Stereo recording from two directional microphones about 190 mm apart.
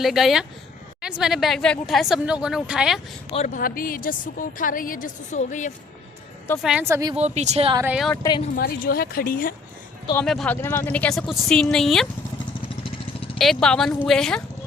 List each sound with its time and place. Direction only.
0.0 s a woman's voice: centre (ahead or behind)
3.2 s a woman's voice: 35° left (ahead or behind)
6.6 s a woman's voice: 5° right (ahead or behind)
6.8 s speech: 15° right (ahead or behind)
7.2 s speech: 35° right (ahead or behind)
7.8 s a woman's voice: 5° right (ahead or behind)
8.1 s speech: 20° left (ahead or behind)
8.5 s a woman's voice: 50° left (ahead or behind)
10.2 s a woman's voice: 5° left (ahead or behind)
13.4 s a woman's voice: 5° left (ahead or behind)